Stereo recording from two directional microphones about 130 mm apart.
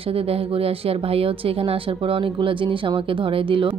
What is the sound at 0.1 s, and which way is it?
A woman's voice, 50° right (ahead or behind).